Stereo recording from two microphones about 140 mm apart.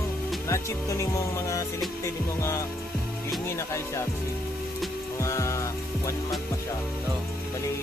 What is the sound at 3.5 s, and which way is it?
Speech, 20° left (ahead or behind).